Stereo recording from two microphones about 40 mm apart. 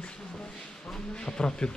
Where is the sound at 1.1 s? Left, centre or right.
Centre.